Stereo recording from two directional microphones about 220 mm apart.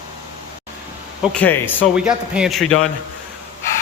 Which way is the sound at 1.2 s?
5° left (ahead or behind).